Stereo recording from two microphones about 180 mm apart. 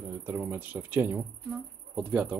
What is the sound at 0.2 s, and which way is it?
Speech, 15° right (ahead or behind).